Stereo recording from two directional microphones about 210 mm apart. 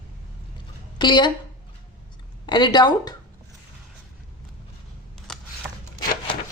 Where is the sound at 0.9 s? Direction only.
20° left (ahead or behind).